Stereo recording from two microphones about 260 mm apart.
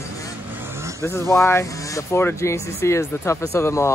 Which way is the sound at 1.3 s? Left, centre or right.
Centre.